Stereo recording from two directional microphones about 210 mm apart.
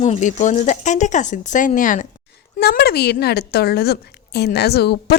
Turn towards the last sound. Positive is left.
turn(degrees=50)  # may be behind; listen again after turning